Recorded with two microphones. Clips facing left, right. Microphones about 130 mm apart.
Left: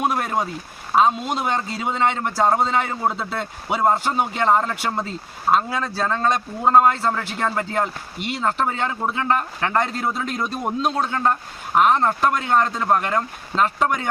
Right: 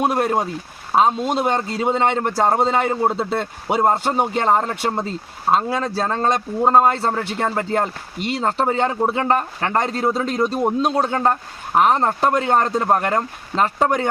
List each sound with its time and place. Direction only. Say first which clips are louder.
0.0 s a man's voice: right 3 dB; 35° right (ahead or behind)